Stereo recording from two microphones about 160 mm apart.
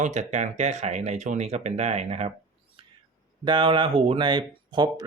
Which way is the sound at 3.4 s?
30° right (ahead or behind).